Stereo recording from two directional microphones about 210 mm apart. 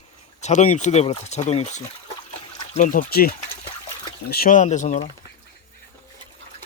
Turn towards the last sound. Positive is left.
turn(degrees=35)  # may be behind; listen again after turning